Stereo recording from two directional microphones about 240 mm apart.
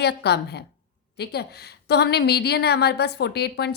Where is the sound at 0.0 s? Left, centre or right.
Left.